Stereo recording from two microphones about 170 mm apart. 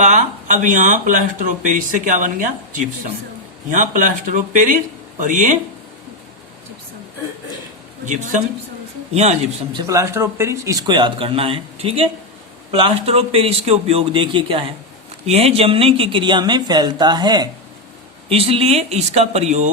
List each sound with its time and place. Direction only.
0.7 s speech: 50° right (ahead or behind)
8.0 s a man's voice: 45° right (ahead or behind)
9.8 s a man's voice: 20° right (ahead or behind)
18.3 s a man's voice: 35° right (ahead or behind)